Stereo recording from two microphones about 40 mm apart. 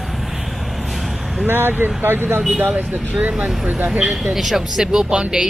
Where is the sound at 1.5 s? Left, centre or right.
Right.